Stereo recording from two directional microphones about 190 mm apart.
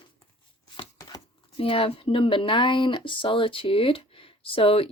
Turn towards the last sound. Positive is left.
turn(degrees=30)  # may be behind; listen again after turning